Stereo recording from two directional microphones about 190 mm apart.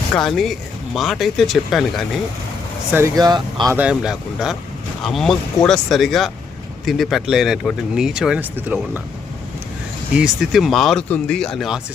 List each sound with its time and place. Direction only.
0.1 s speech: centre (ahead or behind)
2.9 s speech: 15° right (ahead or behind)
3.8 s speech: 5° right (ahead or behind)
10.2 s speech: centre (ahead or behind)